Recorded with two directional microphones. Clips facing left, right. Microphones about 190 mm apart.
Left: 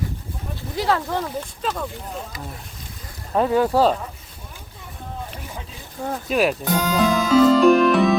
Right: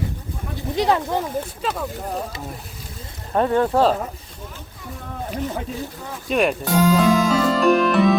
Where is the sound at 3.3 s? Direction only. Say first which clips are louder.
Even; 5° left (ahead or behind).